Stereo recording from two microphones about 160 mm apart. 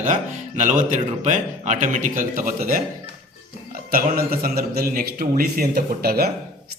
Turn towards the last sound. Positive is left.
turn(degrees=-70)  # may be behind; listen again after turning